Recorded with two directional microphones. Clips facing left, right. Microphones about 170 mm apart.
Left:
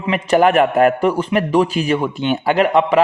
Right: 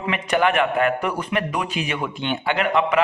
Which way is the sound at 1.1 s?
30° left (ahead or behind).